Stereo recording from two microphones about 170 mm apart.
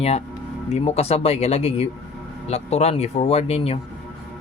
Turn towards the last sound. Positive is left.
turn(degrees=35)  # may be behind; listen again after turning